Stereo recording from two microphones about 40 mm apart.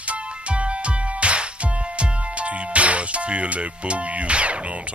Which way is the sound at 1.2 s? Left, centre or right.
Right.